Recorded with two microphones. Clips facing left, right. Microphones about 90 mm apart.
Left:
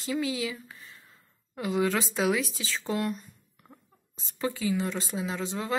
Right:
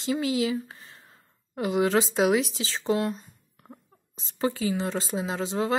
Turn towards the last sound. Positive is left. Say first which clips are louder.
# right 4 dB
turn(degrees=-30)  # may be behind; listen again after turning